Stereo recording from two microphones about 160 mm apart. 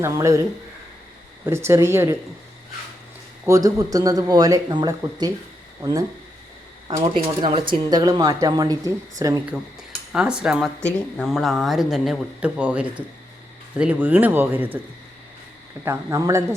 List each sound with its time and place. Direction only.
0.0 s speech: 20° right (ahead or behind)
1.5 s speech: 15° right (ahead or behind)
3.4 s speech: 20° right (ahead or behind)
7.0 s speech: 30° right (ahead or behind)
10.1 s speech: 5° right (ahead or behind)
15.8 s speech: 15° right (ahead or behind)